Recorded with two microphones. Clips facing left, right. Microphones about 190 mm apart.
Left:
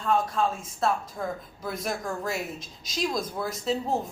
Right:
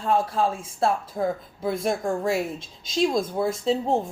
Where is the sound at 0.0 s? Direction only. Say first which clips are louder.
Right 2 dB; 30° right (ahead or behind).